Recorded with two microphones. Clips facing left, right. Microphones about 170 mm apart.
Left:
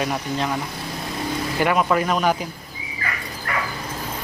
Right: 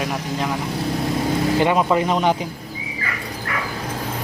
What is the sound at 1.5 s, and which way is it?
Speech, 20° right (ahead or behind).